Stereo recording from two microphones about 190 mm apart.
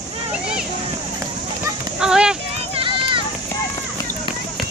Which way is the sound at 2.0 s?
5° right (ahead or behind).